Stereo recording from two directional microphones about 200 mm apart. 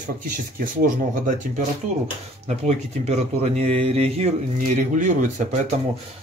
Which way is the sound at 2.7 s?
35° right (ahead or behind).